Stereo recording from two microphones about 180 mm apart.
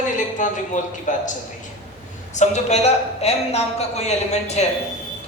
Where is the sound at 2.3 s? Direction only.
40° left (ahead or behind).